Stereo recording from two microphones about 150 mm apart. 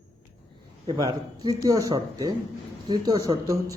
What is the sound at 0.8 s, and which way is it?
A man's voice, 25° right (ahead or behind).